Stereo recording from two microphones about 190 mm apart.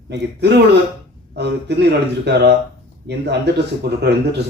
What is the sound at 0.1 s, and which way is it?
Speech, 60° right (ahead or behind).